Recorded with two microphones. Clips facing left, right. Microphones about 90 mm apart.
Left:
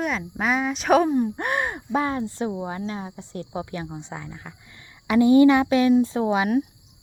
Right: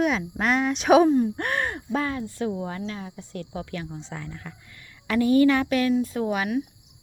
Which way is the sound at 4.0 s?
15° left (ahead or behind).